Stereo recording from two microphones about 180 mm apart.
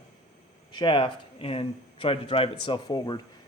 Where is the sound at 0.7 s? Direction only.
25° left (ahead or behind).